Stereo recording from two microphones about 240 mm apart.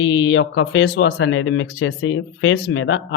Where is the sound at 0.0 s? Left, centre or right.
Left.